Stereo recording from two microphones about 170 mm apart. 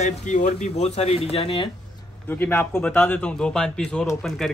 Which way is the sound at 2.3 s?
10° left (ahead or behind).